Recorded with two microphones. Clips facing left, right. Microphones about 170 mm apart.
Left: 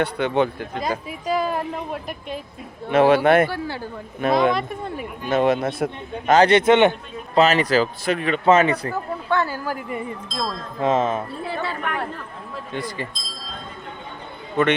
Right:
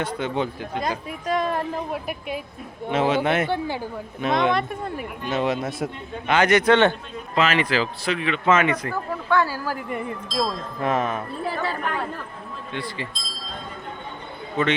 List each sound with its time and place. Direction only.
0.0 s speech: 65° left (ahead or behind)
0.8 s speech: centre (ahead or behind)
2.9 s speech: 60° left (ahead or behind)
3.5 s speech: 15° right (ahead or behind)
4.2 s a man's voice: 50° left (ahead or behind)
4.5 s speech: centre (ahead or behind)
5.3 s a man's voice: 55° left (ahead or behind)
6.3 s speech: 30° left (ahead or behind)
7.3 s a man's voice: 40° left (ahead or behind)
9.4 s speech: 20° left (ahead or behind)
10.8 s speech: 25° left (ahead or behind)
11.4 s speech: 40° right (ahead or behind)
12.7 s a man's voice: 45° left (ahead or behind)
14.6 s speech: 55° left (ahead or behind)